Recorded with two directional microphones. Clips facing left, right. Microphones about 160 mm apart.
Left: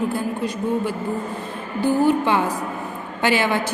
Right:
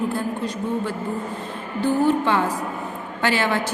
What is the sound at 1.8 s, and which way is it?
A woman's voice, 10° left (ahead or behind).